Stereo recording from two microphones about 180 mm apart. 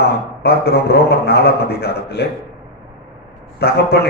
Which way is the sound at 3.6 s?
60° left (ahead or behind).